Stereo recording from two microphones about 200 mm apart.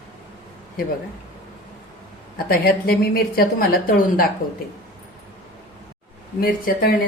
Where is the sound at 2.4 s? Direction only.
50° left (ahead or behind).